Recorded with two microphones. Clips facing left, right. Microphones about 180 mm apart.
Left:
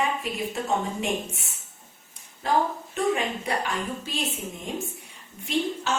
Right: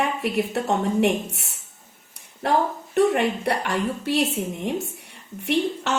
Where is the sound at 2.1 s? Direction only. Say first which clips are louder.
Right 3 dB; 65° right (ahead or behind).